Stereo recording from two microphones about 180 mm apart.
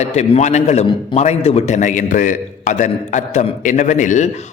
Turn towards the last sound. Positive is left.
turn(degrees=40)  # may be behind; listen again after turning